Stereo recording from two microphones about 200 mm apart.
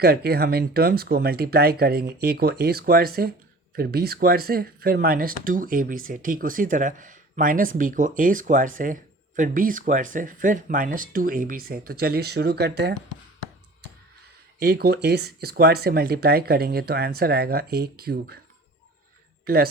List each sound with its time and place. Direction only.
0.0 s speech: 50° right (ahead or behind)
14.6 s speech: 50° right (ahead or behind)